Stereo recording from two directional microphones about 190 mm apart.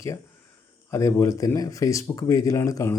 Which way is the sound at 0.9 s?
15° left (ahead or behind).